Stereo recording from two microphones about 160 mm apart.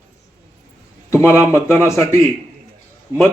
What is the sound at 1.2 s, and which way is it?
A man's voice, 15° left (ahead or behind).